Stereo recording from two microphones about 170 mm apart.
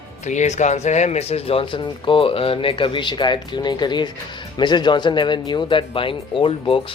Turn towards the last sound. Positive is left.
turn(degrees=30)  # may be behind; listen again after turning